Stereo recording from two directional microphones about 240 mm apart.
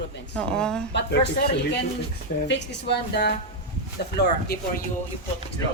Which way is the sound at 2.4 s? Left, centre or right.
Left.